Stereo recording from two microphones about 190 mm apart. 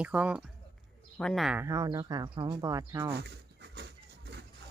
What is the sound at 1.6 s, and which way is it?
Speech, 15° right (ahead or behind).